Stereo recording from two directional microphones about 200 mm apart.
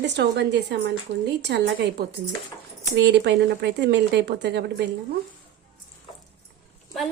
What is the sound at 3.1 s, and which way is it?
A woman's voice, 60° right (ahead or behind).